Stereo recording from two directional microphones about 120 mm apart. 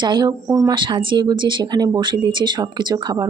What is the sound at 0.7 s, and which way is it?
Speech, 40° right (ahead or behind).